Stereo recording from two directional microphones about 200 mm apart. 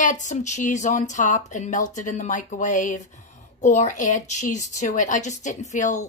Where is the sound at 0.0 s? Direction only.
40° left (ahead or behind).